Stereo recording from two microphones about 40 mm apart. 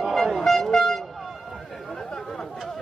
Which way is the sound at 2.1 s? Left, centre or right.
Centre.